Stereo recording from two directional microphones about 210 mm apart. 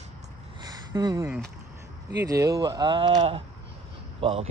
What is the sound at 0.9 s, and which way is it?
Speech, 15° right (ahead or behind).